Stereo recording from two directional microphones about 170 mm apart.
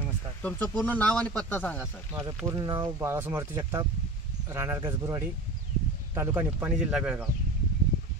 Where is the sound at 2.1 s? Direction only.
25° right (ahead or behind); by 7.2 s 5° right (ahead or behind).